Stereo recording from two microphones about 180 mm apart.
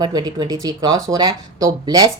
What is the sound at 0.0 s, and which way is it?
Speech, 25° right (ahead or behind).